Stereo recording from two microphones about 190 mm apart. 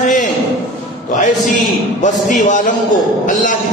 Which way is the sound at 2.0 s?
40° left (ahead or behind).